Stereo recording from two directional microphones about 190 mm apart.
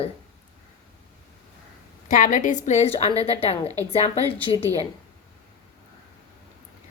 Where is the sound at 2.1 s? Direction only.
45° left (ahead or behind).